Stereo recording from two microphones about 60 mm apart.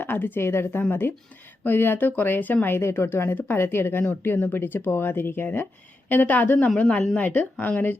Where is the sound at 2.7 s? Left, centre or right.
Left.